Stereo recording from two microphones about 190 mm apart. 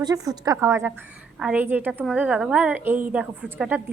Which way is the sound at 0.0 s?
20° right (ahead or behind).